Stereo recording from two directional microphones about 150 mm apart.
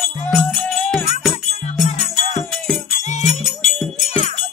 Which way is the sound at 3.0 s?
50° left (ahead or behind).